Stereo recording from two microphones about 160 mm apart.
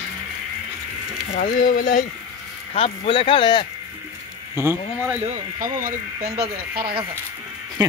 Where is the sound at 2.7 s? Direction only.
35° left (ahead or behind).